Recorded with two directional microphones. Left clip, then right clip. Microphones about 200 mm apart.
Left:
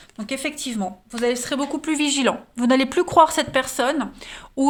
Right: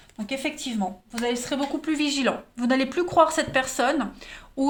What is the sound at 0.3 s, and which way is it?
A woman's voice, 50° left (ahead or behind).